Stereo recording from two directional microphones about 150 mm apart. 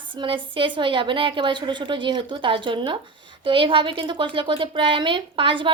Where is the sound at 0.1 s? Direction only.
35° right (ahead or behind).